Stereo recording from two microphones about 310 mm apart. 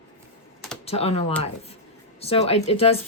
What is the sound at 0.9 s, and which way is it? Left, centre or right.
Speech, centre.